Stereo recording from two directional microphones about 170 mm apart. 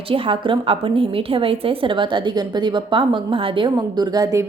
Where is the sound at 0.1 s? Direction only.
30° right (ahead or behind).